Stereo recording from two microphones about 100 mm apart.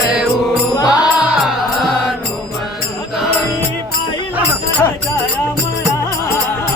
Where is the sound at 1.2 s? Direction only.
10° right (ahead or behind).